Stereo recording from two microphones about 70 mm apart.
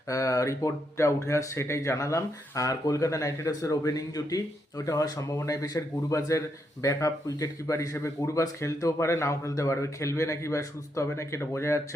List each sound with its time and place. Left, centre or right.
0.1 s speech: left